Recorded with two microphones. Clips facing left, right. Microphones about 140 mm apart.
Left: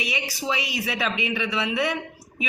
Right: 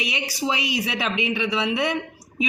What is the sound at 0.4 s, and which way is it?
A woman's voice, 20° right (ahead or behind).